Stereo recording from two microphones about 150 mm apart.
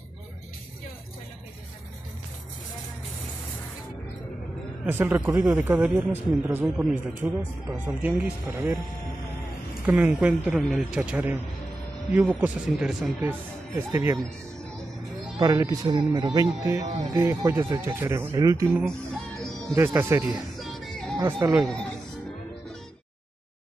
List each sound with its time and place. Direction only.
4.8 s speech: 15° right (ahead or behind)
9.8 s speech: 10° right (ahead or behind)
13.7 s speech: 20° right (ahead or behind)
15.3 s speech: 25° right (ahead or behind)
20.5 s music: centre (ahead or behind)
21.2 s speech: 20° right (ahead or behind)
21.6 s speech: 5° left (ahead or behind)